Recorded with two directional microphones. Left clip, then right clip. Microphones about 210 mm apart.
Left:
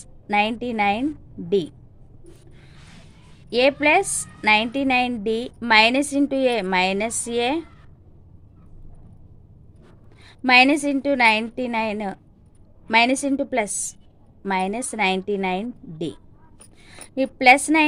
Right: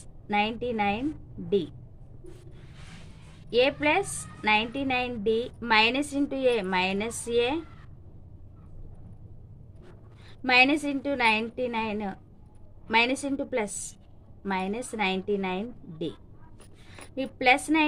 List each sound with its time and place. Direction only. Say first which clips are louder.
0.3 s a woman's voice: left 6 dB; 50° left (ahead or behind)
3.5 s a woman's voice: left 6 dB; 50° left (ahead or behind)
10.2 s a woman's voice: left 6 dB; 50° left (ahead or behind)